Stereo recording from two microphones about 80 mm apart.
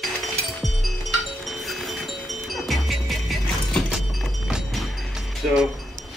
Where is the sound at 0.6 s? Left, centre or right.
Centre.